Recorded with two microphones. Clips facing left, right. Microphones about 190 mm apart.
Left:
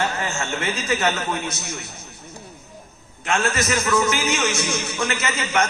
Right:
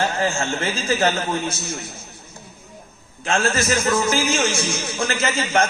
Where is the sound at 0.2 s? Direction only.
30° right (ahead or behind).